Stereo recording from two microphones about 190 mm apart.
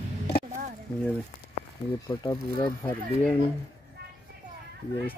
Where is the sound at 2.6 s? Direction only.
10° left (ahead or behind).